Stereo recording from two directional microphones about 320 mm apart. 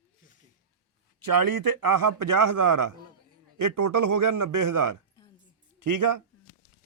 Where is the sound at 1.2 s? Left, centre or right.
Right.